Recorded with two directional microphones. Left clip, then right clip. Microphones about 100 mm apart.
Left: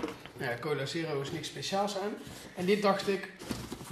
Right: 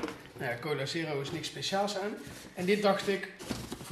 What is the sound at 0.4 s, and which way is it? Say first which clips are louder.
Speech: even; 15° left (ahead or behind).